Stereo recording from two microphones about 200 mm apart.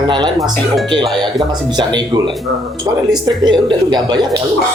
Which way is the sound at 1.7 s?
20° right (ahead or behind).